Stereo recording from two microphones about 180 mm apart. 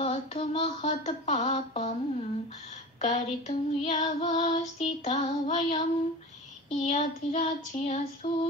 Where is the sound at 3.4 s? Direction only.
40° left (ahead or behind).